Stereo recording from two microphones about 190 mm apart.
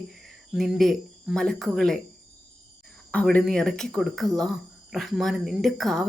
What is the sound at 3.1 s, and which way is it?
A woman's voice, 5° left (ahead or behind).